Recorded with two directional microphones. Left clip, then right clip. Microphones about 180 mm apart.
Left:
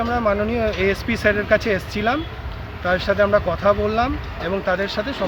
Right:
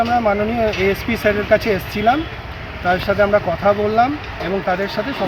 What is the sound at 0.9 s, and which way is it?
Speech, 20° left (ahead or behind).